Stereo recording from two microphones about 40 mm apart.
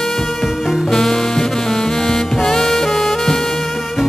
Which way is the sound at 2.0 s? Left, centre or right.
Centre.